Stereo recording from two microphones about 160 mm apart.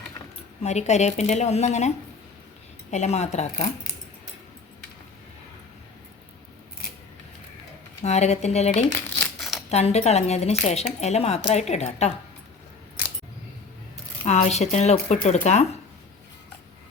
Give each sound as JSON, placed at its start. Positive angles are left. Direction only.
{"t": 0.6, "sound": "speech", "side_deg": 45}
{"t": 2.9, "sound": "speech", "side_deg": 45}
{"t": 8.0, "sound": "speech", "side_deg": 45}
{"t": 9.4, "sound": "a sound", "side_deg": 0}
{"t": 9.6, "sound": "speech", "side_deg": 40}
{"t": 14.3, "sound": "speech", "side_deg": 45}